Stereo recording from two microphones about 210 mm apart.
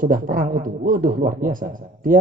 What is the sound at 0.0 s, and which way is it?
Speech, 40° right (ahead or behind).